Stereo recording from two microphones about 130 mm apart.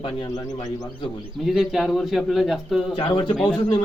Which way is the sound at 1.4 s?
5° right (ahead or behind).